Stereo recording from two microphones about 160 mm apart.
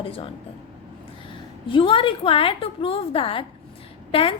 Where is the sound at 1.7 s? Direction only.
30° left (ahead or behind).